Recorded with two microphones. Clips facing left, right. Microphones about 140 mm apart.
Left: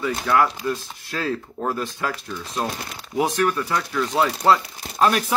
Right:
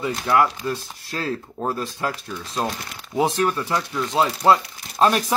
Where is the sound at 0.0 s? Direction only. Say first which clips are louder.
Even; 25° right (ahead or behind).